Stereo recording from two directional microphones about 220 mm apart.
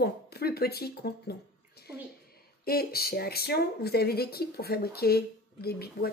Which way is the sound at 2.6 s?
45° left (ahead or behind).